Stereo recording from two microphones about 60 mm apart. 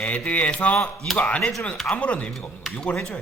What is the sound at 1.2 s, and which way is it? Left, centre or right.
Speech, left.